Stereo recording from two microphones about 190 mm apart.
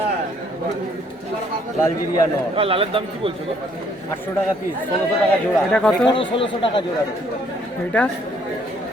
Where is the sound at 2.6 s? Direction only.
30° right (ahead or behind).